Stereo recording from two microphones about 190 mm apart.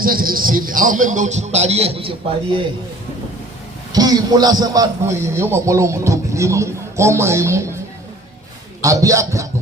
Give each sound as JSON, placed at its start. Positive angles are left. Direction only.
{"t": 0.0, "sound": "a man's voice", "side_deg": -50}
{"t": 3.9, "sound": "a man's voice", "side_deg": -20}
{"t": 8.8, "sound": "a man's voice", "side_deg": -15}